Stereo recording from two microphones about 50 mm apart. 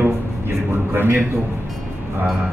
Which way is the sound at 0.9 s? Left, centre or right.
Right.